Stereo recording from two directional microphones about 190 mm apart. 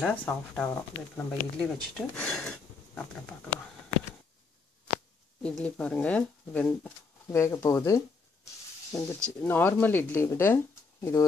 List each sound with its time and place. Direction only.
0.0 s speech: 5° left (ahead or behind)
5.4 s speech: 5° left (ahead or behind)